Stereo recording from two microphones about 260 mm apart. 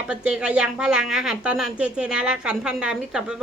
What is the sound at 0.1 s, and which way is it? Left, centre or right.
Speech, centre.